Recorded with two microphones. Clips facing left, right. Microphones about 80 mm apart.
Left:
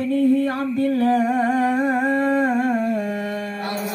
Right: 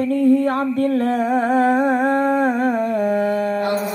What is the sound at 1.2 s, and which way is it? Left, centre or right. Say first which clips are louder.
Humming: right 1 dB; centre.